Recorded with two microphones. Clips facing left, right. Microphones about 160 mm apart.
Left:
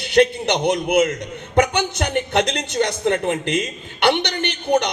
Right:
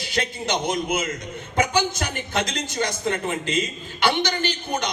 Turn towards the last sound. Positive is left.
turn(degrees=65)  # may be behind; listen again after turning